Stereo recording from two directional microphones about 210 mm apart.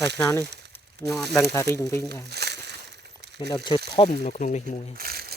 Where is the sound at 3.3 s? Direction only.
20° left (ahead or behind).